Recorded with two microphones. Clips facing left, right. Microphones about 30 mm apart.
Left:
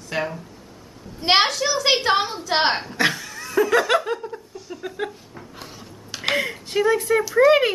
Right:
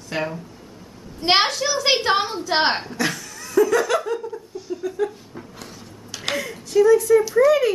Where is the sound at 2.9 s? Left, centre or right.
Left.